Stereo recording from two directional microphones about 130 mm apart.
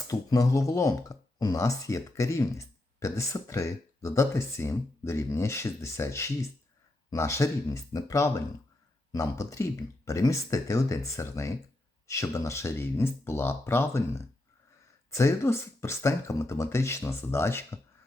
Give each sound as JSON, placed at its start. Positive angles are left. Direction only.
{"t": 0.1, "sound": "speech", "side_deg": 25}